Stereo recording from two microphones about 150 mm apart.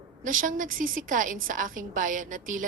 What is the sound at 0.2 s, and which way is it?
A woman's voice, 60° right (ahead or behind).